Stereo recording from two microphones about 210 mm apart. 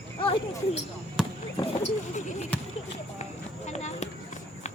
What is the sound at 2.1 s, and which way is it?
Speech, 35° left (ahead or behind).